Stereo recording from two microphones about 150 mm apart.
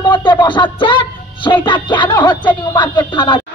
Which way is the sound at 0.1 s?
30° left (ahead or behind).